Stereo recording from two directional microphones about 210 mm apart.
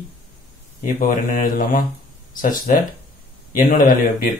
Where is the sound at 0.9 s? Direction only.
40° left (ahead or behind).